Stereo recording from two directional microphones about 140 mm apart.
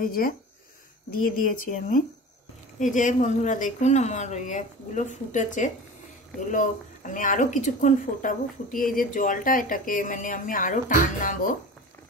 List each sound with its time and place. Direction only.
0.0 s speech: 90° left
1.2 s speech: 80° left
2.8 s speech: 65° left (ahead or behind)